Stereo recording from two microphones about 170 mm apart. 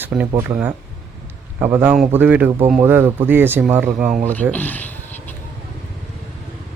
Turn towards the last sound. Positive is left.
turn(degrees=10)  # may be behind; listen again after turning